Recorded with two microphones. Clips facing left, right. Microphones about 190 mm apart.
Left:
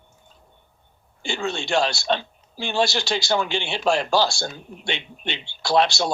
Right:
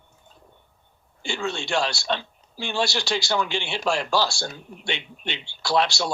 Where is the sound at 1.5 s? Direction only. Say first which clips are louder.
Left 3 dB; 20° left (ahead or behind).